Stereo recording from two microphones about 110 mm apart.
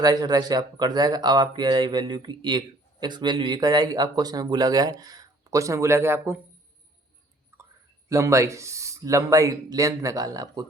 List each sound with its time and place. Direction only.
0.0 s speech: 35° right (ahead or behind)
7.5 s clicking: 25° right (ahead or behind)
8.1 s speech: 25° right (ahead or behind)